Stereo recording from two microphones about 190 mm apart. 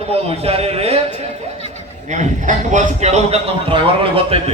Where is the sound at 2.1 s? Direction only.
40° right (ahead or behind).